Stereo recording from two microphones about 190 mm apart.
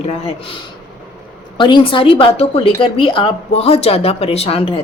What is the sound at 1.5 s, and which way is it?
A woman's voice, 25° left (ahead or behind).